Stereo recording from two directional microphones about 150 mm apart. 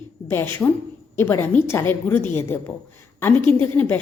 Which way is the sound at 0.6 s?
5° left (ahead or behind).